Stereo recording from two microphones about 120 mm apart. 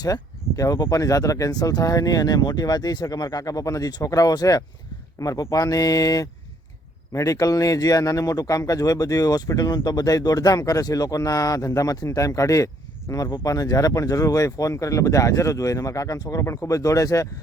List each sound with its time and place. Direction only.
0.0 s speech: 30° left (ahead or behind)